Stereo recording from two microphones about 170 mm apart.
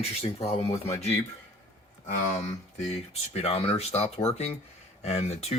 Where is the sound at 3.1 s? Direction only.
35° left (ahead or behind).